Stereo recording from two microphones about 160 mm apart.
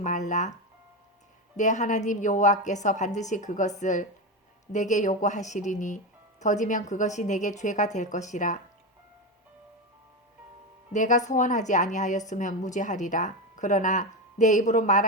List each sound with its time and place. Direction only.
0.0 s speech: 50° left (ahead or behind)
1.5 s a woman's voice: 50° left (ahead or behind)
10.9 s a woman's voice: 50° left (ahead or behind)